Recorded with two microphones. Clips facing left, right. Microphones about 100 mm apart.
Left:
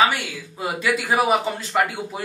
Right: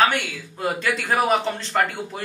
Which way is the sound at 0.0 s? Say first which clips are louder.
Even; 5° left (ahead or behind).